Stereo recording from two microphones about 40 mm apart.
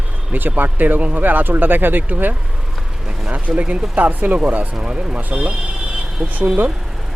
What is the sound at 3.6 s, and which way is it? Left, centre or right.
Speech, right.